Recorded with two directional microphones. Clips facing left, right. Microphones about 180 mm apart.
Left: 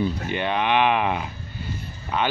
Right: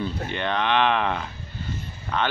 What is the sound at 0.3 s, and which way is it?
Speech, 10° left (ahead or behind).